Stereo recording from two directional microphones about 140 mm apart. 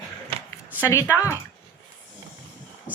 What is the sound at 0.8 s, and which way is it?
Speech, 20° left (ahead or behind).